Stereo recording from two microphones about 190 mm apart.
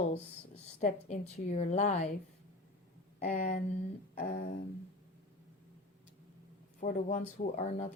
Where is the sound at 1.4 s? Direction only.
35° left (ahead or behind).